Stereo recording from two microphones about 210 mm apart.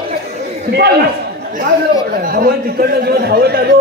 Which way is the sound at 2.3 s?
45° right (ahead or behind).